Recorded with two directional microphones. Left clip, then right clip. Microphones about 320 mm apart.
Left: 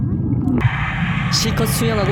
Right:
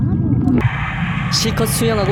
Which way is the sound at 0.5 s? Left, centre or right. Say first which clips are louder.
Right 1 dB; centre.